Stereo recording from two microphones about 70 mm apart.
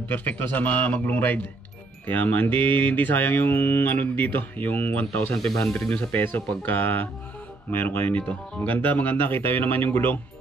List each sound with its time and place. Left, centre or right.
0.1 s mantra: left